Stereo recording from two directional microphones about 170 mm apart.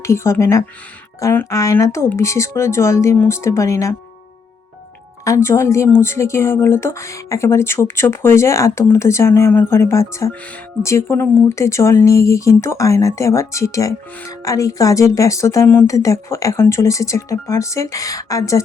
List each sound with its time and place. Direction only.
0.0 s speech: 15° left (ahead or behind)
5.2 s speech: 15° left (ahead or behind)